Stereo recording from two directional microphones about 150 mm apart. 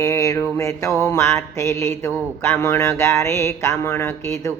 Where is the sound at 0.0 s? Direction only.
20° left (ahead or behind).